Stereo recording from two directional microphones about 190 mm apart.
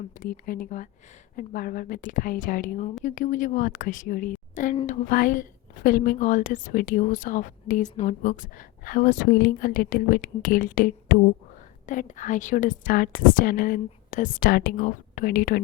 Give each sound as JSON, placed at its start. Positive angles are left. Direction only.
{"t": 0.1, "sound": "a woman's voice", "side_deg": 45}